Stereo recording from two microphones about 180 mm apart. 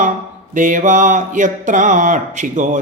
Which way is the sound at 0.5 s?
45° right (ahead or behind).